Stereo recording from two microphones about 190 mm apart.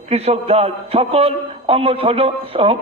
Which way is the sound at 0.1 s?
35° right (ahead or behind).